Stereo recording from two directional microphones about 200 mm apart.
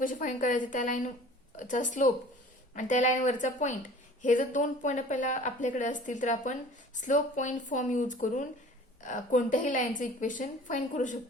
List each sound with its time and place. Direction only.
0.0 s speech: 40° left (ahead or behind)